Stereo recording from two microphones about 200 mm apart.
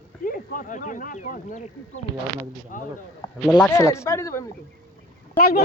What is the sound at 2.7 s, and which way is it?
Speech, 40° left (ahead or behind).